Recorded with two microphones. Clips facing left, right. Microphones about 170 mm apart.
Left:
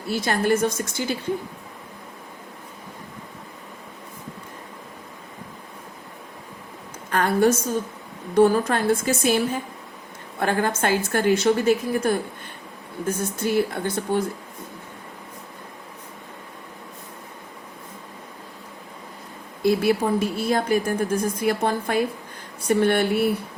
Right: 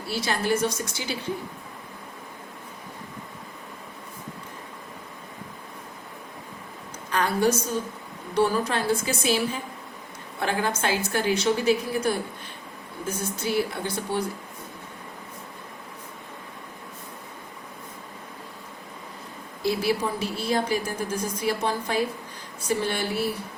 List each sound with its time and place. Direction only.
0.1 s a woman's voice: 50° left (ahead or behind)
7.1 s a sound: 50° left (ahead or behind)
8.4 s a woman's voice: 50° left (ahead or behind)
19.6 s a woman's voice: 50° left (ahead or behind)